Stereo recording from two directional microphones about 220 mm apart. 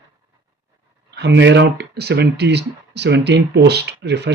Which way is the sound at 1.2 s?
50° right (ahead or behind).